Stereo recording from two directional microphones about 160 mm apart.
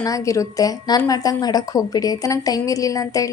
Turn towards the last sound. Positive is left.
turn(degrees=20)  # may be behind; listen again after turning